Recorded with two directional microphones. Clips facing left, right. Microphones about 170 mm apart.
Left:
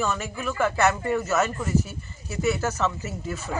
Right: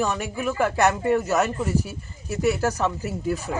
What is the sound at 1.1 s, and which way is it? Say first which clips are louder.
Speech: right 2 dB; 35° right (ahead or behind).